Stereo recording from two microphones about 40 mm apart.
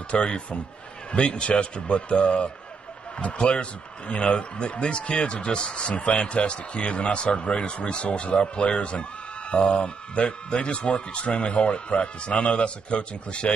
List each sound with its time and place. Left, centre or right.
0.1 s speech: left